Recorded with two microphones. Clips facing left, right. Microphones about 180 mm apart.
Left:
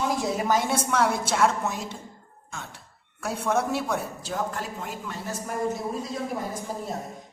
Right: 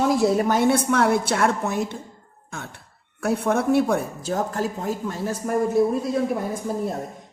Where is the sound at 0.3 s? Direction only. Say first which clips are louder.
Right 5 dB; 60° right (ahead or behind).